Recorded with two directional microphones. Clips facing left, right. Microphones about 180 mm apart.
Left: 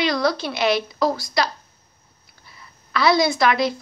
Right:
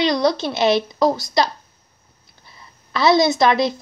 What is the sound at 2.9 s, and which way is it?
Speech, 25° right (ahead or behind).